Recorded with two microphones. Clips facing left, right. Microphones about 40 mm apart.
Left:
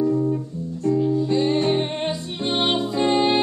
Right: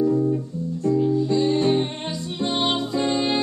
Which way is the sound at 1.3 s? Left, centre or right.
Left.